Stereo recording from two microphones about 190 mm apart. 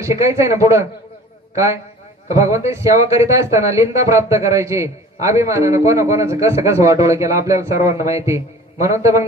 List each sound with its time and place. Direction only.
0.0 s a man's voice: 15° right (ahead or behind)